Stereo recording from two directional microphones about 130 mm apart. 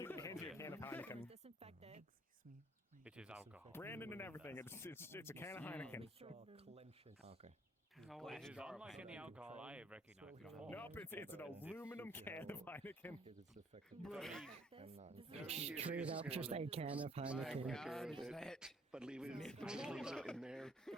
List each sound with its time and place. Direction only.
0.0 s a sound: 20° left (ahead or behind)
1.3 s dog: 50° right (ahead or behind)
3.0 s a sound: 10° right (ahead or behind)
3.7 s speech: 20° left (ahead or behind)
6.0 s speech: 50° right (ahead or behind)
8.0 s speech: 5° left (ahead or behind)
10.7 s speech: 15° left (ahead or behind)
14.0 s speech: centre (ahead or behind)
14.7 s speech: 50° right (ahead or behind)
15.9 s speech: 10° right (ahead or behind)
16.3 s speech: 50° right (ahead or behind)
17.2 s speech: 5° right (ahead or behind)
18.9 s speech: 5° right (ahead or behind)
20.1 s speech: 5° left (ahead or behind)